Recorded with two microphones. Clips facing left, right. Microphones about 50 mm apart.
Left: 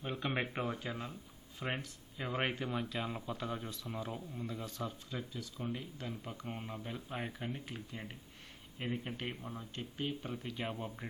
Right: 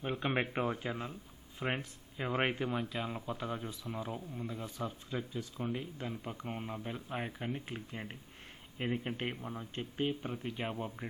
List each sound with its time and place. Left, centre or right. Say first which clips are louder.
0.0 s speech: right 3 dB; centre
2.8 s speech: right 1 dB; centre
7.6 s speech: right 2 dB; right
9.3 s speech: right 3 dB; centre
10.7 s speech: right 2 dB; centre